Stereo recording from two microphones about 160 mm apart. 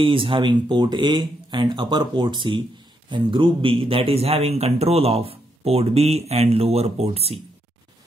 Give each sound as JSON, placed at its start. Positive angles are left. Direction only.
{"t": 0.0, "sound": "a man's voice", "side_deg": -35}